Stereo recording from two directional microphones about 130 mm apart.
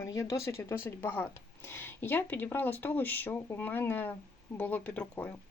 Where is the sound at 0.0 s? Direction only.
25° left (ahead or behind).